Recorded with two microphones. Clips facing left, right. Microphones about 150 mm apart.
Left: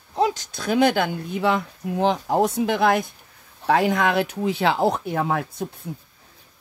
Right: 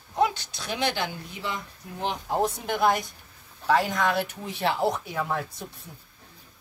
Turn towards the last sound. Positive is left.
turn(degrees=65)  # may be behind; listen again after turning